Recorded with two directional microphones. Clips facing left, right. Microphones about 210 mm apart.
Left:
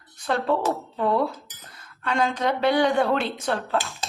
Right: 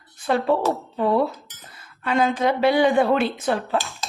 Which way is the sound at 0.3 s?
5° right (ahead or behind).